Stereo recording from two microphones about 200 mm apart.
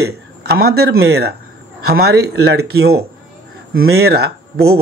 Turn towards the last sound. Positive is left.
turn(degrees=-55)  # may be behind; listen again after turning